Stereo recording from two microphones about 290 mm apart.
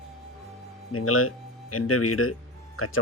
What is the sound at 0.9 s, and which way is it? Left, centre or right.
Speech, left.